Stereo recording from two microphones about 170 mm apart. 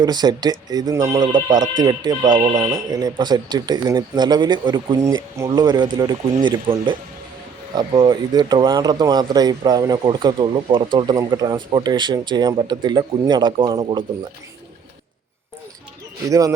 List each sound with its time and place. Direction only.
0.0 s speech: 25° right (ahead or behind)